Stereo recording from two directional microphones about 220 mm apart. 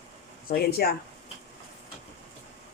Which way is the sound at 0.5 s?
45° left (ahead or behind).